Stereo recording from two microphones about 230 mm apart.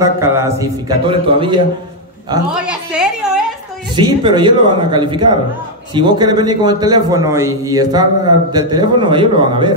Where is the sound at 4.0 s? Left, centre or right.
Centre.